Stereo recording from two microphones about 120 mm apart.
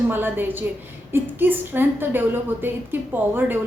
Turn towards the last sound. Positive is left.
turn(degrees=-15)  # may be behind; listen again after turning